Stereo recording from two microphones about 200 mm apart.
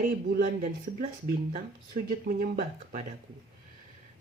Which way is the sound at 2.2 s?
45° right (ahead or behind).